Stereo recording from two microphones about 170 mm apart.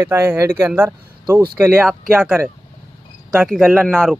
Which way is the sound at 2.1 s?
5° right (ahead or behind).